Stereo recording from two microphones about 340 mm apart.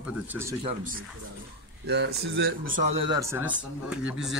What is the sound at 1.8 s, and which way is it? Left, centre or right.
Speech, right.